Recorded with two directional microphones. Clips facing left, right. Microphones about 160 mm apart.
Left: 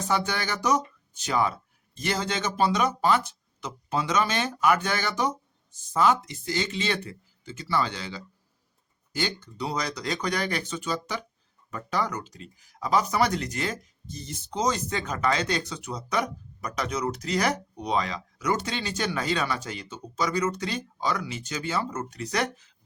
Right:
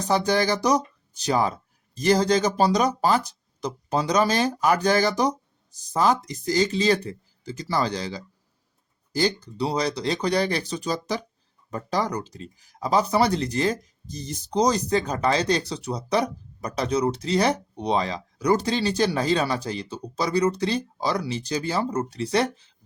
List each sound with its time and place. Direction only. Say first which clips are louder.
0.3 s speech: right 6 dB; 35° right (ahead or behind)